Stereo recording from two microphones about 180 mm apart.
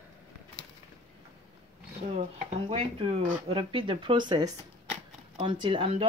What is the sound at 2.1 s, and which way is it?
Speech, 35° right (ahead or behind).